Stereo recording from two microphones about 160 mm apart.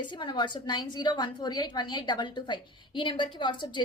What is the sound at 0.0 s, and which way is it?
A woman's voice, 30° left (ahead or behind).